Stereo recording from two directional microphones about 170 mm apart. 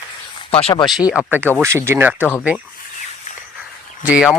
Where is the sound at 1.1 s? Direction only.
10° right (ahead or behind).